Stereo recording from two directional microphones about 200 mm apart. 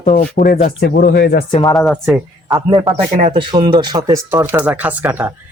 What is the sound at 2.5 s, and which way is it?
A man's voice, 20° right (ahead or behind).